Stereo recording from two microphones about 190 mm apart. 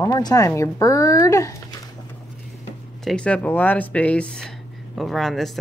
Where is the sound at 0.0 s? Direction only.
20° left (ahead or behind).